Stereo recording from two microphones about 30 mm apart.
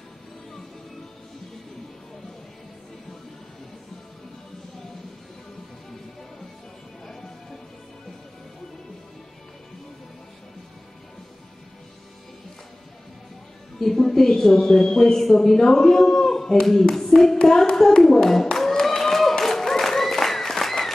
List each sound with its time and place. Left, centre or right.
13.9 s speech: centre
16.9 s hands: centre
17.7 s a sound: centre